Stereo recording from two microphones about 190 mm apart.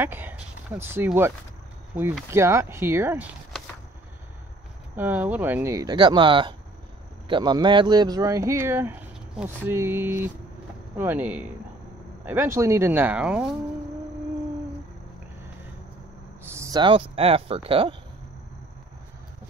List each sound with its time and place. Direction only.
0.0 s speech: 10° right (ahead or behind)
2.3 s speech: 15° right (ahead or behind)
4.9 s speech: 10° right (ahead or behind)
16.5 s speech: 20° right (ahead or behind)